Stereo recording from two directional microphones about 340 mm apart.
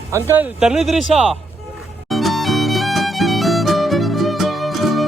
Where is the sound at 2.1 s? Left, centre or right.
Centre.